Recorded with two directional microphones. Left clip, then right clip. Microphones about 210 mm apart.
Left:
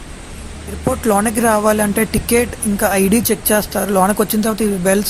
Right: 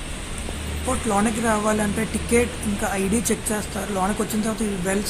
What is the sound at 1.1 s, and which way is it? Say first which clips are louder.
Speech: left 7 dB; 50° left (ahead or behind).